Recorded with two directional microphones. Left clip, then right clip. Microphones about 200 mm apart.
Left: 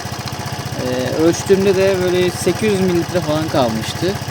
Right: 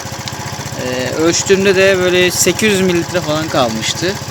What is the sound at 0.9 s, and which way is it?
Speech, 15° left (ahead or behind).